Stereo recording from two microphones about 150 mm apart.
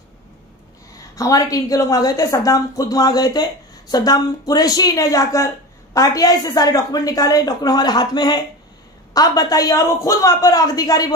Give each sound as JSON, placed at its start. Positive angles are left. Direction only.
{"t": 0.9, "sound": "a woman's voice", "side_deg": 20}